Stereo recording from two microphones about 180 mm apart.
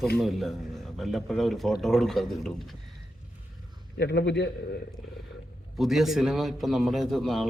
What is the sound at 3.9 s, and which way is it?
Speech, 70° left (ahead or behind).